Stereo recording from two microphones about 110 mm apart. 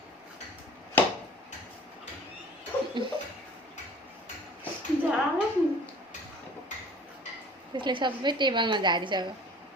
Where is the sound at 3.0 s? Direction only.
45° right (ahead or behind).